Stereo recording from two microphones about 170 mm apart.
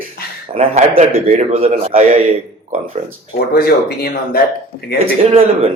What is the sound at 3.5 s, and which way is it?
Speech, 60° left (ahead or behind).